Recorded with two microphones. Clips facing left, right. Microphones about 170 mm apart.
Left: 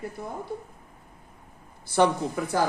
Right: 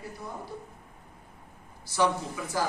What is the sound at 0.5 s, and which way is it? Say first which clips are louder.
Speech: left 6 dB; 50° left (ahead or behind).